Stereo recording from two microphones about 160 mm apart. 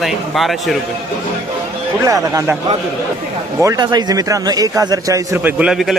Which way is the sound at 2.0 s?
20° right (ahead or behind).